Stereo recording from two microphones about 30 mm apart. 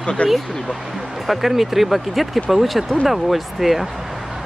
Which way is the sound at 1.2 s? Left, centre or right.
Centre.